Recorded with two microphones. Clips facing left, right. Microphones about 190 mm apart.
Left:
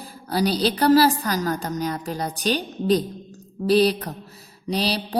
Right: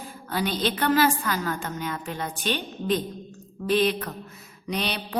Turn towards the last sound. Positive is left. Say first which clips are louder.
# left 5 dB
turn(degrees=35)  # may be behind; listen again after turning